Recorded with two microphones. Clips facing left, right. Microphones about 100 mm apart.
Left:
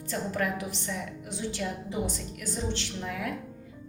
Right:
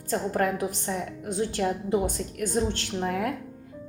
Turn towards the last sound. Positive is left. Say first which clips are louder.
# right 6 dB
turn(degrees=-50)  # may be behind; listen again after turning